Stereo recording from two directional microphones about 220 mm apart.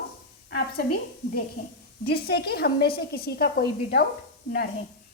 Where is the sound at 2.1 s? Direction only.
45° left (ahead or behind).